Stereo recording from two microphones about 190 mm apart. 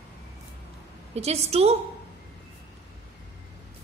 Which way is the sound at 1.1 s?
35° right (ahead or behind).